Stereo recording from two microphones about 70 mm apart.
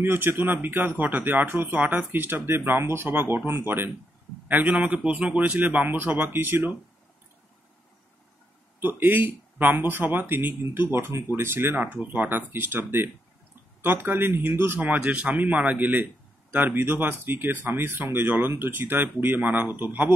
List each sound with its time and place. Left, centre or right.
0.0 s speech: right
8.7 s speech: right
14.8 s speech: right